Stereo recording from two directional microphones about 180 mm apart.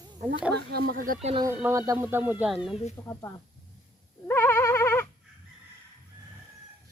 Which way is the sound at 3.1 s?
15° left (ahead or behind).